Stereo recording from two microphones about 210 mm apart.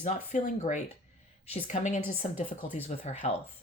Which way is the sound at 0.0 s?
35° left (ahead or behind).